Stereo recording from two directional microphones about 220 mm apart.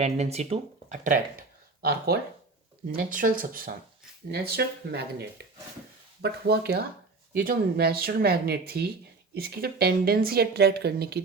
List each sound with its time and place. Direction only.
0.0 s a woman's voice: 30° right (ahead or behind); by 11.2 s 45° right (ahead or behind)